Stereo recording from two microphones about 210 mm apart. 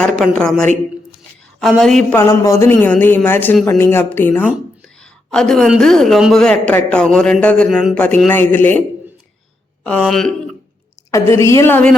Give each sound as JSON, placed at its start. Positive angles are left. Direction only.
{"t": 0.0, "sound": "a woman's voice", "side_deg": 5}
{"t": 1.7, "sound": "a woman's voice", "side_deg": 0}
{"t": 2.1, "sound": "a woman's voice", "side_deg": 15}
{"t": 9.8, "sound": "a woman's voice", "side_deg": 5}
{"t": 11.1, "sound": "speech", "side_deg": 15}